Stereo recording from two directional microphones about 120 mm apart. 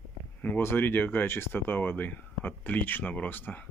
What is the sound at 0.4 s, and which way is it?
Speech, 15° left (ahead or behind).